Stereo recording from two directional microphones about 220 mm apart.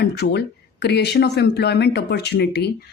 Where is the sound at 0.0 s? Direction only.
50° left (ahead or behind).